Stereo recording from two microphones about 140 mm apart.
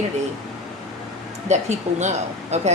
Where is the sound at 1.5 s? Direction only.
55° right (ahead or behind).